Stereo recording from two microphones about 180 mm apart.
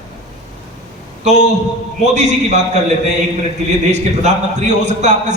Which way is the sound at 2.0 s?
40° right (ahead or behind).